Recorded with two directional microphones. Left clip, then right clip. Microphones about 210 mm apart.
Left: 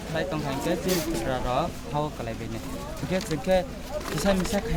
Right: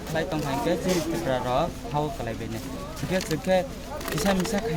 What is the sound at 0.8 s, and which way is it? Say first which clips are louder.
Speech: right 1 dB; 40° left (ahead or behind).